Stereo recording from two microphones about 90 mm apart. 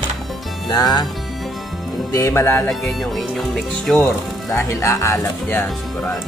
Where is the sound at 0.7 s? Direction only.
45° left (ahead or behind).